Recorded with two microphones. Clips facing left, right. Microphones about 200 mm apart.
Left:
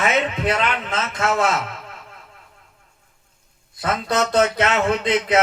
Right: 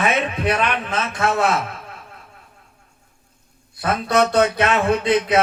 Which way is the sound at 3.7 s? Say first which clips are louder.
Right 3 dB; 25° left (ahead or behind).